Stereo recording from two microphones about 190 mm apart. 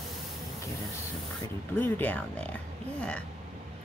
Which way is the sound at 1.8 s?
10° left (ahead or behind).